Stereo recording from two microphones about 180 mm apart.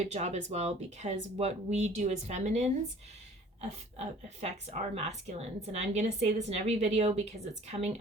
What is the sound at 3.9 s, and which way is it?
A woman's voice, 40° right (ahead or behind).